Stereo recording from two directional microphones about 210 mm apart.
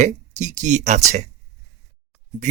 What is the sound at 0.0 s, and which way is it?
Speech, 35° right (ahead or behind).